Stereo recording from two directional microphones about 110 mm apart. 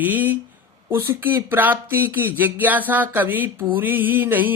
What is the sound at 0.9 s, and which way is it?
Speech, 20° right (ahead or behind).